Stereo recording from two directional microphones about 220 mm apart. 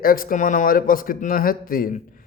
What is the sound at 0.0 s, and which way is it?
Speech, 40° left (ahead or behind).